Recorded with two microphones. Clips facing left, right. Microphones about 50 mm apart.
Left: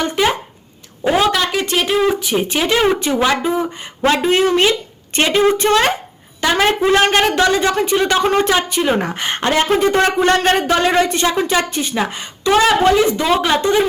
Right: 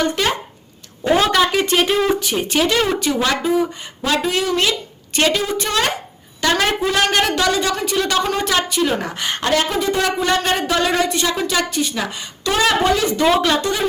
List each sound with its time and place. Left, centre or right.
0.0 s speech: centre
1.1 s a woman's voice: centre; by 5.9 s left
6.4 s speech: centre
6.7 s a woman's voice: left